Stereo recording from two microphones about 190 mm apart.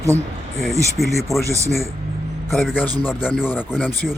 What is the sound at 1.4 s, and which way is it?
Speech, 15° right (ahead or behind).